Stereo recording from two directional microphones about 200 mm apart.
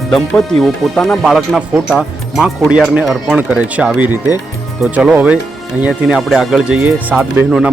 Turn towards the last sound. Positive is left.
turn(degrees=-5)  # may be behind; listen again after turning